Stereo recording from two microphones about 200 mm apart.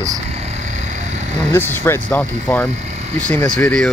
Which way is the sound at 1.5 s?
10° left (ahead or behind).